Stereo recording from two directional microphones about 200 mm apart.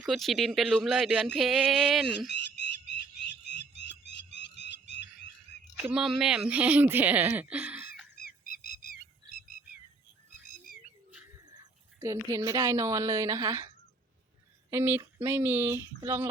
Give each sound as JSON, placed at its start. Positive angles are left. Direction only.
{"t": 0.0, "sound": "speech", "side_deg": 0}
{"t": 2.3, "sound": "frog", "side_deg": 60}
{"t": 3.8, "sound": "music", "side_deg": 60}
{"t": 5.7, "sound": "speech", "side_deg": -5}
{"t": 8.2, "sound": "bird", "side_deg": 50}
{"t": 11.9, "sound": "speech", "side_deg": -15}